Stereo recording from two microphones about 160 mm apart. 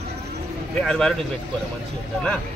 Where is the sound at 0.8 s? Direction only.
5° left (ahead or behind).